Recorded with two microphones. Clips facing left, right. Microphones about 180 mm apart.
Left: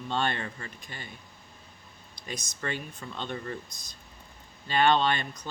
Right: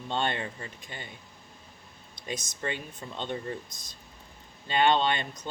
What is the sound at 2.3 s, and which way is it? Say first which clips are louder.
Speech: right 1 dB; 25° right (ahead or behind).